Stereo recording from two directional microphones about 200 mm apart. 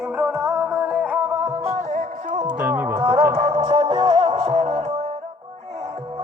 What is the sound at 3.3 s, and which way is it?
Music, 30° right (ahead or behind).